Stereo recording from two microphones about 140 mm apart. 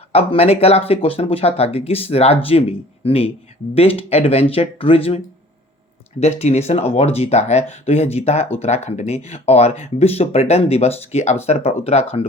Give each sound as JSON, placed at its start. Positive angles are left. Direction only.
{"t": 0.1, "sound": "speech", "side_deg": 45}